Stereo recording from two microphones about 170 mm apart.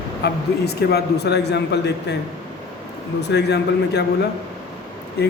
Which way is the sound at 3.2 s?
85° left.